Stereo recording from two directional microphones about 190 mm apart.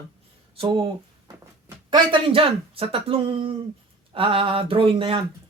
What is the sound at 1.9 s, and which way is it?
Speech, 30° right (ahead or behind).